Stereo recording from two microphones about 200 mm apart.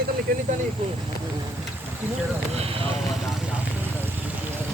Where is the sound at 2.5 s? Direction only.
30° right (ahead or behind).